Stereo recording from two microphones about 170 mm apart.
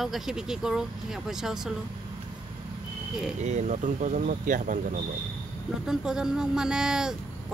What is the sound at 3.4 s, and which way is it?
Speech, 45° right (ahead or behind).